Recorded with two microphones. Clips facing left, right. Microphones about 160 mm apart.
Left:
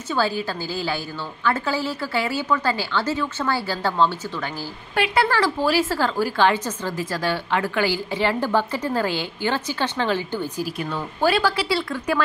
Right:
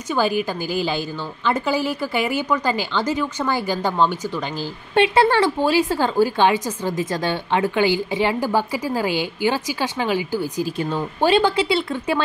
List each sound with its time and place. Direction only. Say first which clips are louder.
0.1 s speech: right 3 dB; 15° right (ahead or behind)
10.8 s speech: right 2 dB; 25° right (ahead or behind)